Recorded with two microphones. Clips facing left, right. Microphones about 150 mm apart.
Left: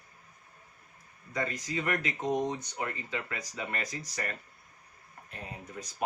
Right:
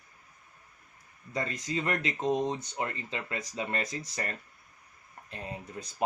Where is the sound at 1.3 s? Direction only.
25° right (ahead or behind).